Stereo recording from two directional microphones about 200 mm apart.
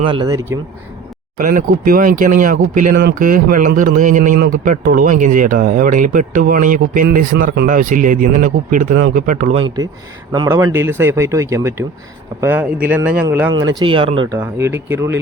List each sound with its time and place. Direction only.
0.0 s speech: 25° right (ahead or behind)
1.4 s speech: 45° right (ahead or behind)
2.9 s a man's voice: 55° right (ahead or behind); by 14.3 s 25° right (ahead or behind)
14.3 s speech: 10° right (ahead or behind)